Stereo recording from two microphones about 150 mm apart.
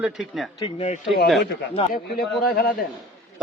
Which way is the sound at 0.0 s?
Centre (ahead or behind).